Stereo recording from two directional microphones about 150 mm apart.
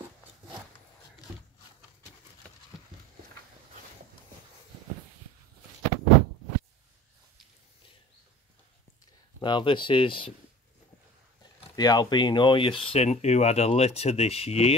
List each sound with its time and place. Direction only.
9.4 s speech: 35° left (ahead or behind)
11.7 s speech: 25° left (ahead or behind); by 14.8 s 45° left (ahead or behind)